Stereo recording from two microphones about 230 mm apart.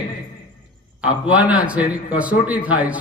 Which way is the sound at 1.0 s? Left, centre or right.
Centre.